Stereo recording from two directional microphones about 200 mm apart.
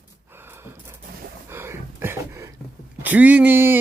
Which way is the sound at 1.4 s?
15° right (ahead or behind).